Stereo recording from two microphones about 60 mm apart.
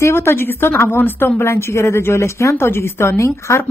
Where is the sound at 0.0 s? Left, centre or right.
Left.